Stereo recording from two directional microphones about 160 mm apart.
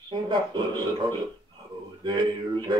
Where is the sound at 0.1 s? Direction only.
30° right (ahead or behind).